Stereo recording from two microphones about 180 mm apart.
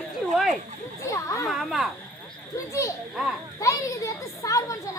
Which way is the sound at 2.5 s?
15° left (ahead or behind).